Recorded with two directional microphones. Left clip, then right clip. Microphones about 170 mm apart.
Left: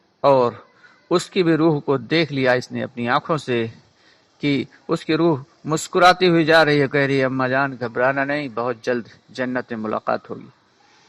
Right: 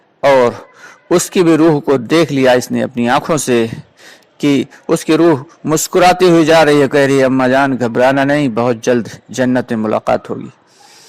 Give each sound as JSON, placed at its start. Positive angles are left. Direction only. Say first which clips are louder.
{"t": 0.2, "sound": "a man's voice", "louder": "right 6 dB", "side_deg": -40}